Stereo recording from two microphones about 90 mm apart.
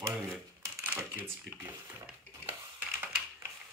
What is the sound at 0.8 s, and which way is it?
Speech, 20° right (ahead or behind).